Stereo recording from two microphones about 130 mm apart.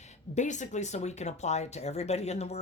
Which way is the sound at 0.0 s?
65° left (ahead or behind).